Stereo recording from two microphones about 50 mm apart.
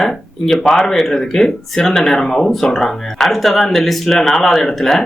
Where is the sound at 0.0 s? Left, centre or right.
Centre.